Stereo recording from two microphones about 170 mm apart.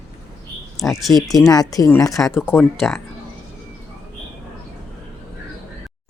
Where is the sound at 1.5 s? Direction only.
20° left (ahead or behind).